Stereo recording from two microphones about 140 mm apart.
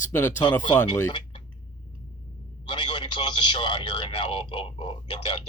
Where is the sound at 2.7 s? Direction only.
35° left (ahead or behind).